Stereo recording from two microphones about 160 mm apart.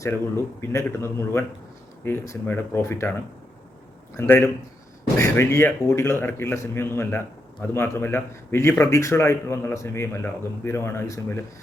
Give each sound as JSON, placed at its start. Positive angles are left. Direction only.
{"t": 0.0, "sound": "speech", "side_deg": 15}
{"t": 4.2, "sound": "speech", "side_deg": 15}